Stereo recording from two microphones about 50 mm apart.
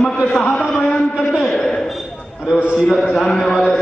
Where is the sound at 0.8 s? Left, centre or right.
Centre.